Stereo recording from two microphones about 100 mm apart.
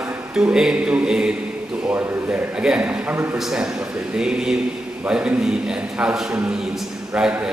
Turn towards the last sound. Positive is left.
turn(degrees=-10)  # may be behind; listen again after turning